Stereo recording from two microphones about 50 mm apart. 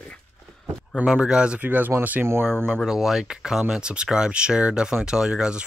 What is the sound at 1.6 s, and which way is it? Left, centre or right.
Speech, right.